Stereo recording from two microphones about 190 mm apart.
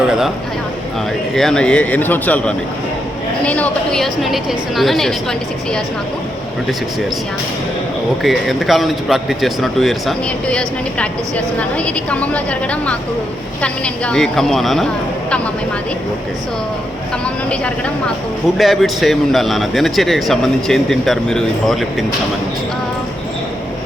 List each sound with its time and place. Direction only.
1.4 s speech: 5° left (ahead or behind)
8.2 s speech: centre (ahead or behind)
17.5 s speech: 5° left (ahead or behind)